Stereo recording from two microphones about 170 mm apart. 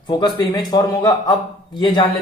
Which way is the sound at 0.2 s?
25° left (ahead or behind).